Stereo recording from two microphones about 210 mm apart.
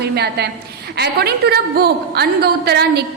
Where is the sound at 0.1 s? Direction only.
50° right (ahead or behind).